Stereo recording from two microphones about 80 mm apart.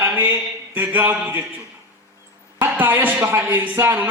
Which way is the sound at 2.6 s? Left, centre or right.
Right.